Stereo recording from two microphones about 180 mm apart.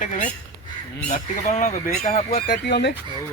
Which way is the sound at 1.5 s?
45° left (ahead or behind).